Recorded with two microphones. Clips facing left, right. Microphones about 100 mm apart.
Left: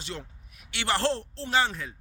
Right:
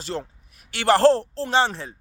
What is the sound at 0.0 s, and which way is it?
A man's voice, 35° right (ahead or behind).